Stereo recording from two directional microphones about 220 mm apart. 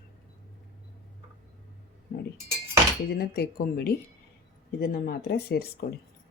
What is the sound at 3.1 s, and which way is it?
Speech, 45° left (ahead or behind).